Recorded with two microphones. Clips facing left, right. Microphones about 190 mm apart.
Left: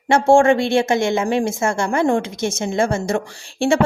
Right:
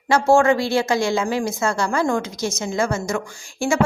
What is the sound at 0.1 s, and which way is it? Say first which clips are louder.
A woman's voice: left 3 dB; 25° left (ahead or behind).